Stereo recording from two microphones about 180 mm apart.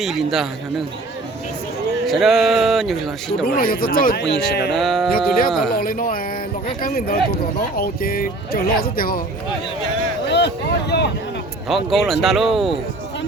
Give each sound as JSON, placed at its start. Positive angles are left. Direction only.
{"t": 0.0, "sound": "speech", "side_deg": 0}
{"t": 2.0, "sound": "speech", "side_deg": 0}
{"t": 3.4, "sound": "speech", "side_deg": 55}
{"t": 4.7, "sound": "speech", "side_deg": 0}
{"t": 5.7, "sound": "speech", "side_deg": 50}
{"t": 10.3, "sound": "vehicle", "side_deg": 70}
{"t": 11.7, "sound": "speech", "side_deg": 0}